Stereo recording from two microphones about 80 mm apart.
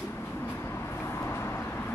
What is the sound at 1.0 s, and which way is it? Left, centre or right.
Vehicle, left.